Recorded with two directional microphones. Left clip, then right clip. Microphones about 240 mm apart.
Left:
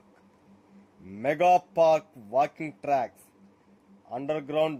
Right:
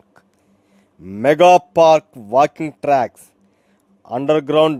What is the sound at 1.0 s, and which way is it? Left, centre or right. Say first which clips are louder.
A man's voice: right 12 dB; right.